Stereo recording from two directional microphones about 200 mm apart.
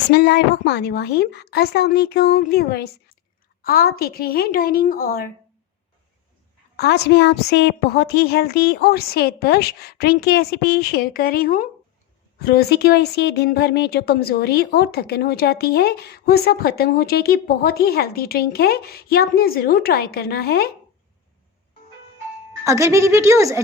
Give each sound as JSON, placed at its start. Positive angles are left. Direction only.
{"t": 0.1, "sound": "a woman's voice", "side_deg": 55}
{"t": 6.7, "sound": "speech", "side_deg": 55}
{"t": 22.6, "sound": "a woman's voice", "side_deg": -15}